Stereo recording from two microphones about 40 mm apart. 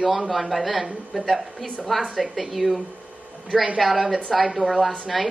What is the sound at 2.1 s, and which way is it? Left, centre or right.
Speech, centre.